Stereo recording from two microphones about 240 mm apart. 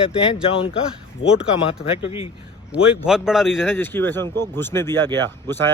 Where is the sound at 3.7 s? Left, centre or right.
Centre.